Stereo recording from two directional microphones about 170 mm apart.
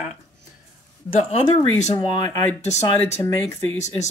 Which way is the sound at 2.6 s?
40° left (ahead or behind).